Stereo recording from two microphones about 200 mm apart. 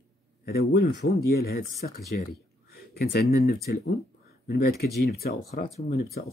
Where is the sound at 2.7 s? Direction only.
50° left (ahead or behind).